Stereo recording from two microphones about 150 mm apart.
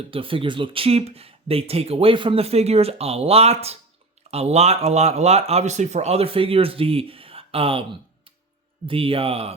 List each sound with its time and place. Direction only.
0.1 s speech: 35° right (ahead or behind)